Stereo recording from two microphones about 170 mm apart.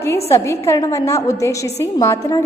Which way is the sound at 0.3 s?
15° left (ahead or behind).